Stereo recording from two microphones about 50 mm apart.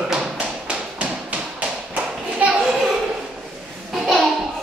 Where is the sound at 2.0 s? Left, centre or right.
Right.